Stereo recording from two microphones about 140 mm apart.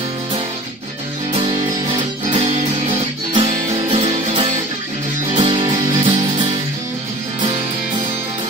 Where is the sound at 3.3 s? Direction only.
45° right (ahead or behind).